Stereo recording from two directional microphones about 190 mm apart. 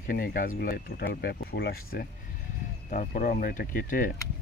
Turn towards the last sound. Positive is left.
turn(degrees=45)  # may be behind; listen again after turning